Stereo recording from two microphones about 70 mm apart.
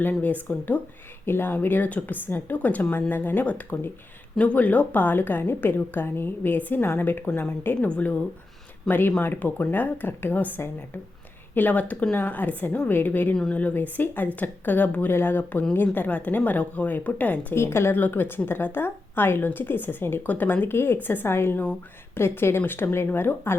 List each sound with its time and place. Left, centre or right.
0.0 s a woman's voice: left
1.2 s a woman's voice: left
7.8 s speech: centre
8.9 s a woman's voice: left
11.5 s a woman's voice: left
13.3 s speech: centre
13.6 s a woman's voice: left
17.5 s a woman's voice: left